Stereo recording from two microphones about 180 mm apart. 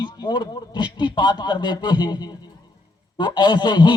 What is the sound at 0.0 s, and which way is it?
A man's voice, 25° left (ahead or behind).